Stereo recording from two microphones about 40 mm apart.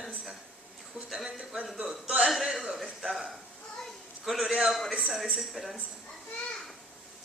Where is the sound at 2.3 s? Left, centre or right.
Centre.